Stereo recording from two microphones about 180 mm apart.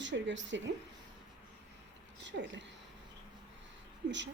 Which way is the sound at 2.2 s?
90° right.